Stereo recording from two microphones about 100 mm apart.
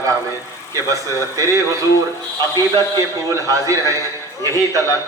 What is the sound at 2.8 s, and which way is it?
A man's voice, 35° right (ahead or behind).